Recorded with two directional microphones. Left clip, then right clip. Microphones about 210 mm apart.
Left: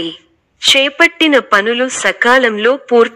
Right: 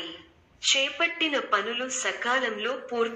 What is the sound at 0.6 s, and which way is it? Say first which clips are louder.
A woman's voice: left 15 dB; 50° left (ahead or behind).